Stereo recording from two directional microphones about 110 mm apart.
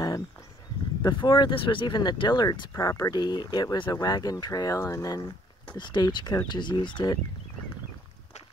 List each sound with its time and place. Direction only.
1.0 s speech: 40° left (ahead or behind)
2.7 s speech: 25° left (ahead or behind)
5.8 s speech: 40° left (ahead or behind)